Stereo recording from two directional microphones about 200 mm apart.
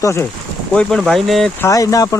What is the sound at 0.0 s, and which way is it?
Speech, 15° left (ahead or behind).